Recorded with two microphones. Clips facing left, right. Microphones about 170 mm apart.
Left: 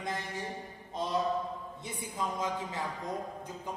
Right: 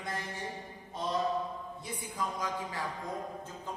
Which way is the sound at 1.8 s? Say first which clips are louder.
Left 1 dB; 25° left (ahead or behind).